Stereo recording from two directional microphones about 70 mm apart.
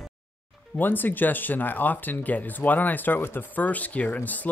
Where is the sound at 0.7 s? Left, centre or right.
Left.